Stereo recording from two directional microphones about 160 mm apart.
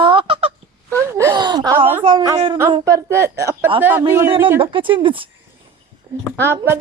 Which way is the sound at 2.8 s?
20° right (ahead or behind).